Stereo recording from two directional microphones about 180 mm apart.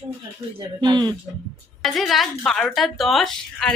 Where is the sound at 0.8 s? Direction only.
25° right (ahead or behind).